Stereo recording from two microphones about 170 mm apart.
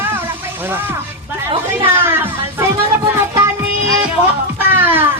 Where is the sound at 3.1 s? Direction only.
15° right (ahead or behind).